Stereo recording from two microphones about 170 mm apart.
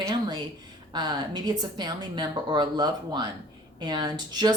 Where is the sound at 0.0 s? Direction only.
25° right (ahead or behind).